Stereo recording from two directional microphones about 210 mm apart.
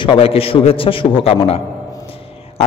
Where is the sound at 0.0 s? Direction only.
25° left (ahead or behind).